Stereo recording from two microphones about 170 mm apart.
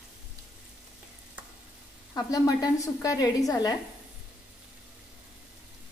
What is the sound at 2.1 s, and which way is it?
A woman's voice, 20° left (ahead or behind).